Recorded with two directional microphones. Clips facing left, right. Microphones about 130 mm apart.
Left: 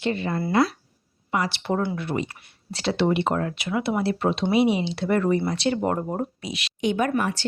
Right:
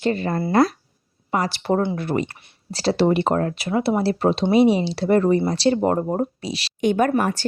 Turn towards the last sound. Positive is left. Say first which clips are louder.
# right 4 dB
turn(degrees=-45)  # may be behind; listen again after turning